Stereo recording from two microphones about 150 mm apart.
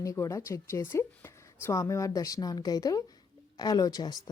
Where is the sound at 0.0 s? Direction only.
20° left (ahead or behind).